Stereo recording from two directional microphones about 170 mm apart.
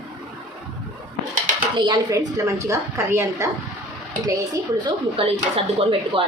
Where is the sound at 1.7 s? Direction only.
25° right (ahead or behind).